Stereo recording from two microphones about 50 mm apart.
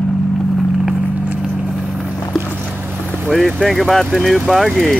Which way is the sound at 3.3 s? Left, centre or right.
Centre.